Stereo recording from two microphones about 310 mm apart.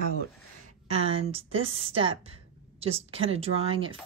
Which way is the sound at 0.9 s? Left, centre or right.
Centre.